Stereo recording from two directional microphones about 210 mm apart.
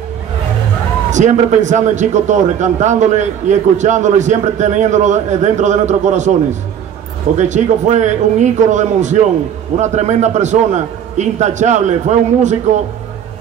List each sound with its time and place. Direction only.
1.1 s a man's voice: 35° right (ahead or behind)
7.3 s a man's voice: 35° right (ahead or behind)